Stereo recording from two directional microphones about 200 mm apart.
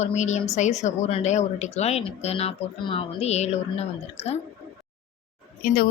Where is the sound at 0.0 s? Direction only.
35° left (ahead or behind).